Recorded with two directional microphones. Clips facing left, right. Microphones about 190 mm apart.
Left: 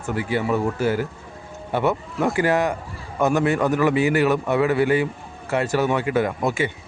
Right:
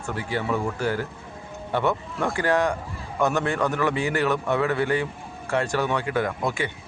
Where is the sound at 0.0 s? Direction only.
15° left (ahead or behind).